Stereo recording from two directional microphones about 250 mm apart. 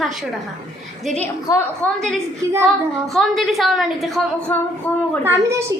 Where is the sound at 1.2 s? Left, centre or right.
Centre.